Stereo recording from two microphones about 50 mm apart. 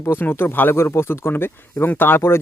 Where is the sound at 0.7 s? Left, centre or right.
Left.